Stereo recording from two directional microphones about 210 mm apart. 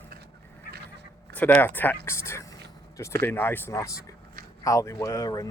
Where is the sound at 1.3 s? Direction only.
10° left (ahead or behind).